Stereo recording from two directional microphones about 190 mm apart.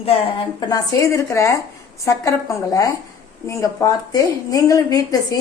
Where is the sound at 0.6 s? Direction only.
20° left (ahead or behind).